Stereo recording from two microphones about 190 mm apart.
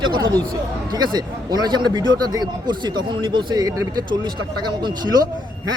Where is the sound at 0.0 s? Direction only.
25° right (ahead or behind).